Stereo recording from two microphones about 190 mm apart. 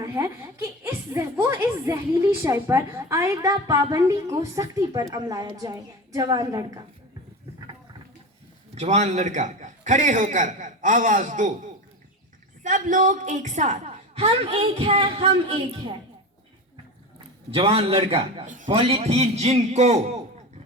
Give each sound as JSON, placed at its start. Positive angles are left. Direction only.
{"t": 0.0, "sound": "a woman's voice", "side_deg": -15}
{"t": 8.7, "sound": "a man's voice", "side_deg": -35}
{"t": 12.6, "sound": "a man's voice", "side_deg": -40}
{"t": 17.5, "sound": "a man's voice", "side_deg": -30}
{"t": 18.4, "sound": "a man's voice", "side_deg": -40}